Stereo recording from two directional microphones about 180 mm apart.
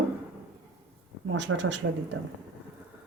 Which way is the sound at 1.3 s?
80° right.